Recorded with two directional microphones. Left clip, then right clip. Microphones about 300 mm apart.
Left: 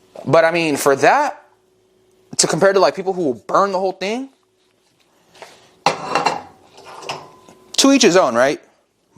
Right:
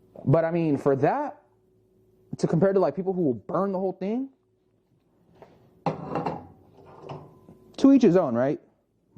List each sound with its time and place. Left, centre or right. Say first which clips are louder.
0.1 s speech: left 10 dB; centre
3.2 s speech: left 6 dB; left
3.5 s speech: left 11 dB; centre
5.3 s dishes: left 12 dB; centre